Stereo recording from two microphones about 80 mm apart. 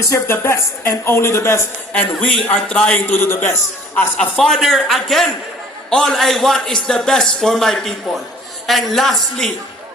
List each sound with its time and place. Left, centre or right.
0.0 s a man's voice: left
1.9 s a man's voice: centre; by 4.0 s left
4.4 s a man's voice: centre